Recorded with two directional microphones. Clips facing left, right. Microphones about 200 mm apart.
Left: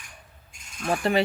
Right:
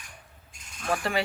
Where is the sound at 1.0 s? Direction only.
20° left (ahead or behind).